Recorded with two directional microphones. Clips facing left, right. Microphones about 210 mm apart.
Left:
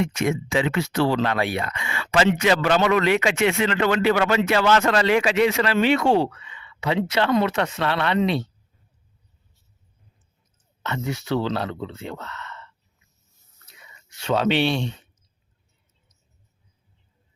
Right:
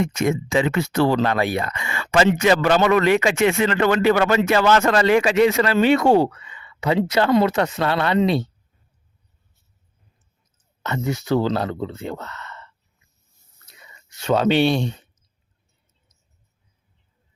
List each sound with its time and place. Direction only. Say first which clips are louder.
0.0 s speech: right 2 dB; 45° right (ahead or behind)
10.8 s speech: right 4 dB; 40° right (ahead or behind)
13.8 s speech: right 4 dB; 40° right (ahead or behind)